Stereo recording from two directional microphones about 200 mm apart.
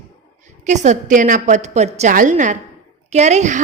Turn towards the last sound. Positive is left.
turn(degrees=-35)  # may be behind; listen again after turning